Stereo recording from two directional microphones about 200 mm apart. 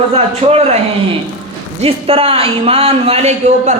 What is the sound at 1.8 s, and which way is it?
A man's voice, 30° right (ahead or behind).